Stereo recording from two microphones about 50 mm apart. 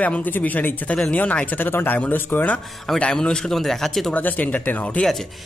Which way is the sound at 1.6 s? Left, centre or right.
Left.